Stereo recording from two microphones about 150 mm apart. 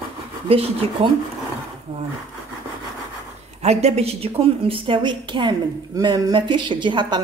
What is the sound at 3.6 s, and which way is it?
A woman's voice, 45° right (ahead or behind).